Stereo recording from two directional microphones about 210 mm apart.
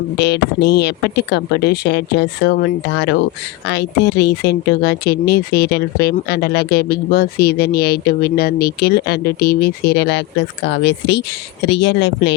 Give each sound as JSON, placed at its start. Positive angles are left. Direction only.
{"t": 0.2, "sound": "speech", "side_deg": 55}